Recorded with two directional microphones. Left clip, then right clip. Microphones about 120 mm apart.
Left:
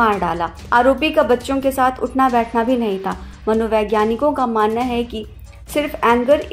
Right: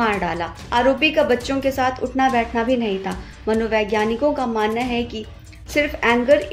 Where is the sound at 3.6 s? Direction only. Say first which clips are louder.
Left 3 dB; 15° left (ahead or behind).